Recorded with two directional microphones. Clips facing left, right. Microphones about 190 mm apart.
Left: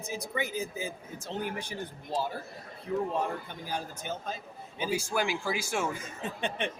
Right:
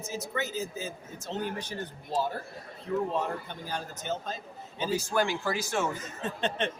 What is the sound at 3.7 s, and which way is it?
Speech, 10° left (ahead or behind).